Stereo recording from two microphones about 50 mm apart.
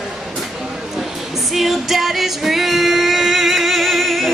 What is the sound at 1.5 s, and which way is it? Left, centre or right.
Music, centre.